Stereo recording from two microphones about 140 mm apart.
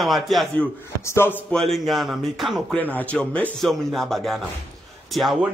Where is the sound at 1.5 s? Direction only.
Centre (ahead or behind).